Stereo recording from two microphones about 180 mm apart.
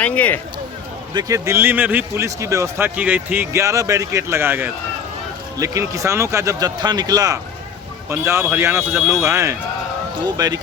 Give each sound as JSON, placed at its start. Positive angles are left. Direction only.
{"t": 0.0, "sound": "speech", "side_deg": 10}
{"t": 1.1, "sound": "a man's voice", "side_deg": -15}